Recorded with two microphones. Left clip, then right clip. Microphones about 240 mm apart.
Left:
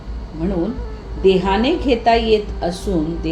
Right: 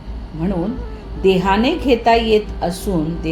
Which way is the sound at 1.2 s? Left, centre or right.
Right.